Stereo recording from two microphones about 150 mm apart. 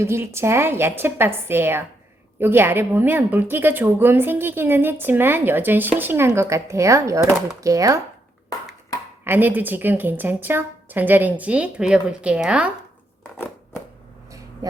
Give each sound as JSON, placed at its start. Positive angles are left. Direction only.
{"t": 0.0, "sound": "a woman's voice", "side_deg": -15}
{"t": 9.2, "sound": "a woman's voice", "side_deg": -15}